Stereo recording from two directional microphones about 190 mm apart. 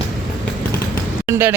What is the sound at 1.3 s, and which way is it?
Speech, 10° right (ahead or behind).